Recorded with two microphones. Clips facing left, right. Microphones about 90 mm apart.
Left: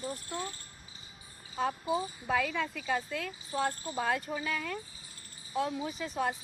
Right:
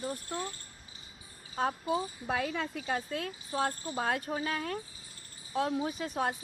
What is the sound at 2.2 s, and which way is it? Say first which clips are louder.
Speech: left 5 dB; 45° right (ahead or behind).